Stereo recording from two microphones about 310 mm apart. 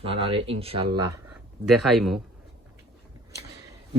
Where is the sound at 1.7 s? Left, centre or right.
Centre.